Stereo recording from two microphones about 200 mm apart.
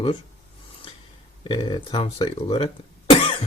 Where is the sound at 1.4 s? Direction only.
25° left (ahead or behind).